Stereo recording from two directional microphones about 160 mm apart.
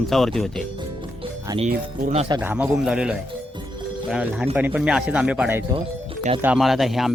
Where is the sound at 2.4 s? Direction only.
10° right (ahead or behind).